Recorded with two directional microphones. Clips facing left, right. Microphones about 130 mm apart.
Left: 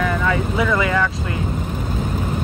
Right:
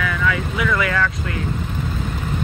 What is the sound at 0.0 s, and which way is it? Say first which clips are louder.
Vehicle: left 2 dB; 30° left (ahead or behind).